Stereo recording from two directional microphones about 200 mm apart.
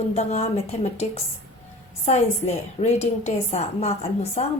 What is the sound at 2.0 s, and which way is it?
A woman's voice, 35° left (ahead or behind).